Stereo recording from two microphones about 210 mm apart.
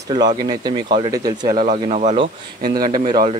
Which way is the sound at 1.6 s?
30° right (ahead or behind).